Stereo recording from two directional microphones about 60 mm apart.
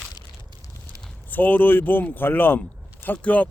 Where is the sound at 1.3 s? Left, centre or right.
Left.